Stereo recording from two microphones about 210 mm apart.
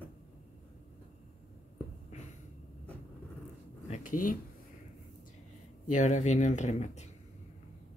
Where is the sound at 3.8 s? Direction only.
35° left (ahead or behind).